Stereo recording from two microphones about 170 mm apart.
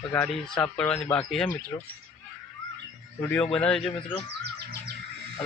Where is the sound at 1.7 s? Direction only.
15° left (ahead or behind).